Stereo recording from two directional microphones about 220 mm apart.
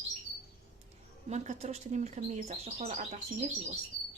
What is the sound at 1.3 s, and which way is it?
Speech, 30° right (ahead or behind).